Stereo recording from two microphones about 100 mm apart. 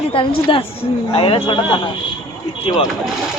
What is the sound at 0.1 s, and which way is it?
A woman's voice, 60° left (ahead or behind).